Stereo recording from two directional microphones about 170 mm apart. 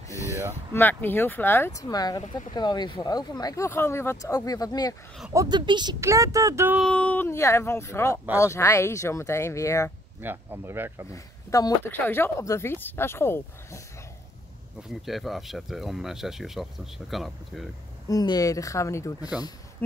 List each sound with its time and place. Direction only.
0.7 s speech: 10° left (ahead or behind)
5.3 s speech: 20° right (ahead or behind)
6.8 s speech: 5° left (ahead or behind)
10.2 s speech: 10° right (ahead or behind)
11.5 s speech: 15° left (ahead or behind)
14.8 s speech: centre (ahead or behind)
18.0 s speech: 20° left (ahead or behind)